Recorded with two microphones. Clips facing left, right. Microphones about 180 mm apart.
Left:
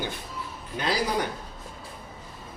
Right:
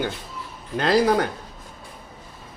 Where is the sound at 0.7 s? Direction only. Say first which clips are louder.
Right 9 dB; 90° right.